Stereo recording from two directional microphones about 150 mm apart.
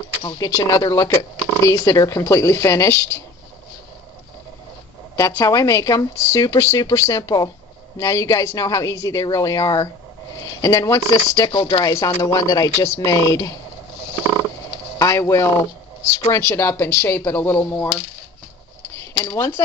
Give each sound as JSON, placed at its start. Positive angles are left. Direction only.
{"t": 0.2, "sound": "speech", "side_deg": 25}
{"t": 5.1, "sound": "speech", "side_deg": 20}
{"t": 15.0, "sound": "speech", "side_deg": 20}
{"t": 19.2, "sound": "speech", "side_deg": 20}